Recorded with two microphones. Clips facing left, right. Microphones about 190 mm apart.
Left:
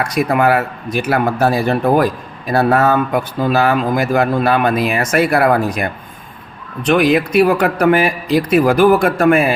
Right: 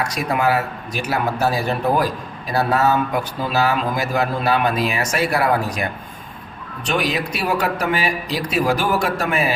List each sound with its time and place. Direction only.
0.0 s speech: 55° left (ahead or behind)